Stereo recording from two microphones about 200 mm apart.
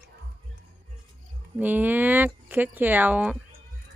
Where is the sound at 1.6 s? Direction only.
10° right (ahead or behind).